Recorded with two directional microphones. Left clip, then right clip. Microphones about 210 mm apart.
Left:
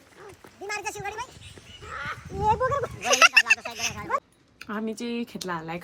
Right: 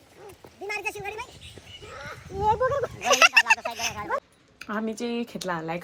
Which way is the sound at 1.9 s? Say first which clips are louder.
Left 5 dB; centre (ahead or behind).